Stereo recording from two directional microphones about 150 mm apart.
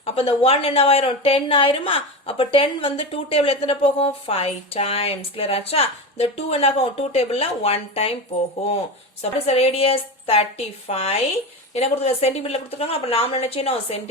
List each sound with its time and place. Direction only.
0.0 s a woman's voice: 40° left (ahead or behind)